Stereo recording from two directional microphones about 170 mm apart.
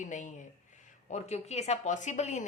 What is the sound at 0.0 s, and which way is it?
Speech, 45° left (ahead or behind).